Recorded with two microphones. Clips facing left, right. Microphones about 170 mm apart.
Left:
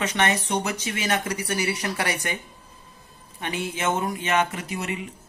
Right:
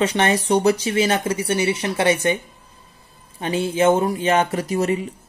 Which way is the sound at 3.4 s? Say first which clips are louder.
Right 9 dB; 30° right (ahead or behind).